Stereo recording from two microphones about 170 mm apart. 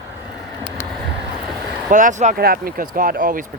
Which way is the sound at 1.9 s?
50° right (ahead or behind).